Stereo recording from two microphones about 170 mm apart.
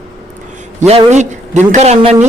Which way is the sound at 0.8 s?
40° right (ahead or behind).